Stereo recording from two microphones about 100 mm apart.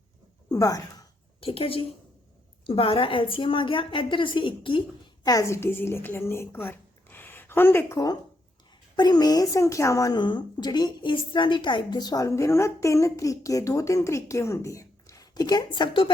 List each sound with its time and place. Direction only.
0.5 s speech: 35° left (ahead or behind)
1.4 s a woman's voice: 65° left (ahead or behind)
5.2 s a woman's voice: 35° left (ahead or behind)
7.9 s a woman's voice: 40° left (ahead or behind)
10.2 s a woman's voice: 50° left (ahead or behind)